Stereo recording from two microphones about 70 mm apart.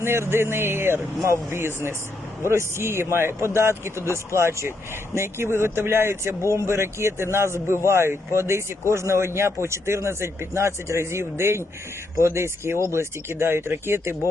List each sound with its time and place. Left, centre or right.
0.0 s speech: right
1.2 s speech: right